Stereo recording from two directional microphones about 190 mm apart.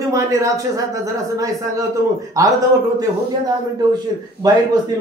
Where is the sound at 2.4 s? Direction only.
20° right (ahead or behind).